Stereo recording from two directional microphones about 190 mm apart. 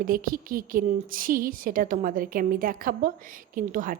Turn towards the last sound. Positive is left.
turn(degrees=-45)  # may be behind; listen again after turning